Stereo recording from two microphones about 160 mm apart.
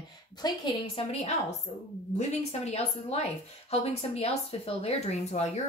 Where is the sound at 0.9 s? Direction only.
40° left (ahead or behind).